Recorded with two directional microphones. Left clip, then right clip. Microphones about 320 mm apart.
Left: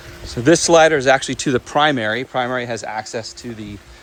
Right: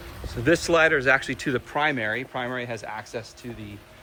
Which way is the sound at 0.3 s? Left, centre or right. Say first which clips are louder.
Left 8 dB; centre.